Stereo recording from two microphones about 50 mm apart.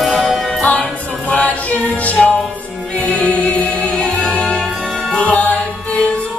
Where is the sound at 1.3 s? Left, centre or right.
Left.